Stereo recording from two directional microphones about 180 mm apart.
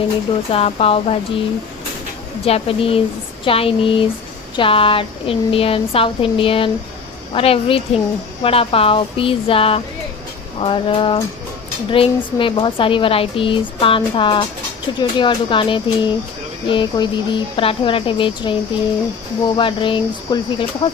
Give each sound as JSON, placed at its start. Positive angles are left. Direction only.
{"t": 0.5, "sound": "speech", "side_deg": 30}
{"t": 2.4, "sound": "speech", "side_deg": 30}
{"t": 19.5, "sound": "speech", "side_deg": 30}